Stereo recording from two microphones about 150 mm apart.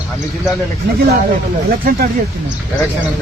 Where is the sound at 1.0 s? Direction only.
90° right.